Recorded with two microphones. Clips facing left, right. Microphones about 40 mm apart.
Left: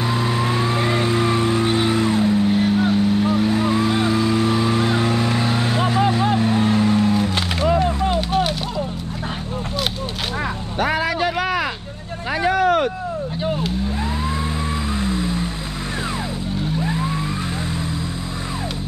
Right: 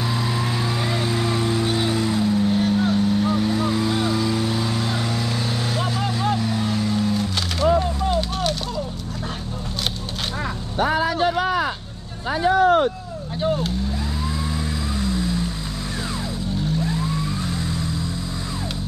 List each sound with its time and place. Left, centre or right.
0.0 s vehicle: centre
7.8 s a sound: left
10.8 s vehicle: left
12.4 s a sound: left
15.0 s music: left
16.8 s vehicle: left